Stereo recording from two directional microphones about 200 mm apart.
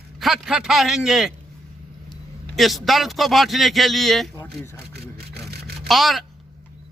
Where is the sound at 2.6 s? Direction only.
Centre (ahead or behind).